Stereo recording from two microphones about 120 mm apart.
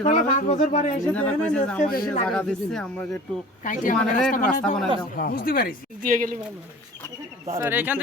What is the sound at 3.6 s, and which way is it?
Speech, 90° left.